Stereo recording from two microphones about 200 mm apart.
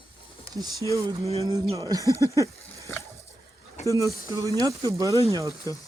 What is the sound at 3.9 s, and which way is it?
Speech, 15° right (ahead or behind).